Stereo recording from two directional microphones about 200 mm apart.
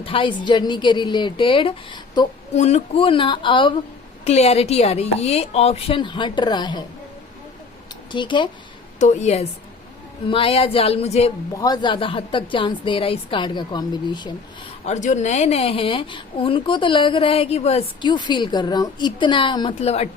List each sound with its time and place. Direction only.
0.0 s speech: 25° left (ahead or behind)
8.1 s speech: 25° left (ahead or behind)
9.0 s speech: 35° left (ahead or behind)
11.5 s speech: 20° left (ahead or behind)
14.8 s speech: 35° left (ahead or behind)